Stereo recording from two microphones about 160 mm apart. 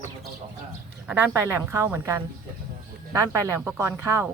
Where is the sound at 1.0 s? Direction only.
10° right (ahead or behind).